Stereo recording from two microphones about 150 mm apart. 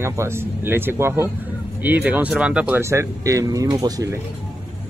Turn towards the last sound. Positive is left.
turn(degrees=-25)  # may be behind; listen again after turning